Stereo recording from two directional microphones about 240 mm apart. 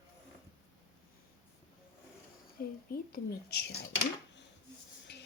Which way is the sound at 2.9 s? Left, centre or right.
Left.